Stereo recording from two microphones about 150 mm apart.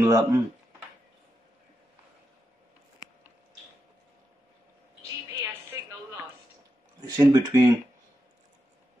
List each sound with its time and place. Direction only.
0.0 s speech: 20° right (ahead or behind)
5.4 s music: 20° right (ahead or behind)
7.2 s speech: 25° right (ahead or behind)